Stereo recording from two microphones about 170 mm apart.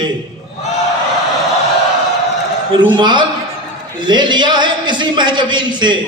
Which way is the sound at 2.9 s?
25° right (ahead or behind).